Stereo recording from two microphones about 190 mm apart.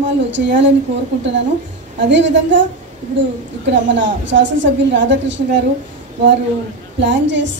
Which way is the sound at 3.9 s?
70° right (ahead or behind).